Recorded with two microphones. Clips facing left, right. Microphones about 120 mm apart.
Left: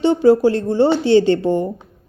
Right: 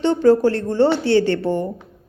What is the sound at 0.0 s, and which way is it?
A woman's voice, 15° left (ahead or behind).